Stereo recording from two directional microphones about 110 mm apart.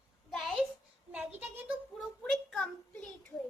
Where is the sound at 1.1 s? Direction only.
15° right (ahead or behind).